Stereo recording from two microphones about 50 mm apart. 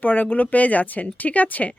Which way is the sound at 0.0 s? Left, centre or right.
Left.